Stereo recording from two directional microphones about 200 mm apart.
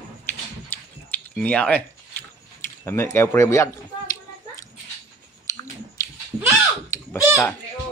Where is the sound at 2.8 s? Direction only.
10° left (ahead or behind).